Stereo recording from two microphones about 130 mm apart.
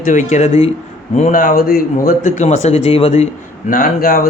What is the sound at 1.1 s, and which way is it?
Speech, 75° left (ahead or behind).